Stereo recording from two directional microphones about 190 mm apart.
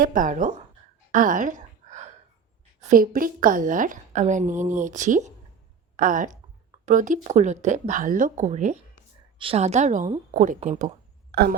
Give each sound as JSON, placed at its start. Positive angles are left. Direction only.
{"t": 0.0, "sound": "speech", "side_deg": -45}
{"t": 1.1, "sound": "a sound", "side_deg": -45}
{"t": 2.9, "sound": "a woman's voice", "side_deg": -45}
{"t": 11.3, "sound": "speech", "side_deg": -55}